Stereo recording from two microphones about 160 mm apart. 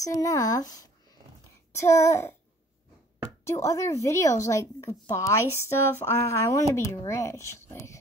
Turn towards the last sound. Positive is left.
turn(degrees=20)  # may be behind; listen again after turning